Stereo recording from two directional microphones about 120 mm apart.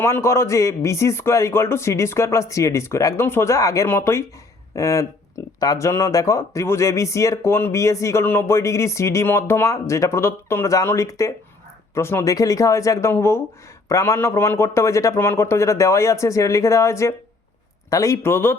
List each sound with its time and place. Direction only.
0.0 s speech: 20° left (ahead or behind)